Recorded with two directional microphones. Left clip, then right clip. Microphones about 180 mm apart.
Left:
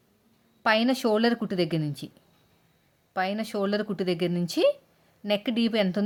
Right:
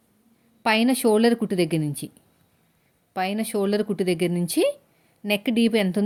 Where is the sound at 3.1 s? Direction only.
10° right (ahead or behind).